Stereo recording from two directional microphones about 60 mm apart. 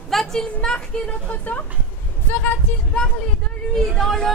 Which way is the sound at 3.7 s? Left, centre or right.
Centre.